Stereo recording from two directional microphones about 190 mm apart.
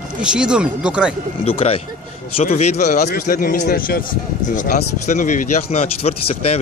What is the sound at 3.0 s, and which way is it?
A man's voice, 50° left (ahead or behind).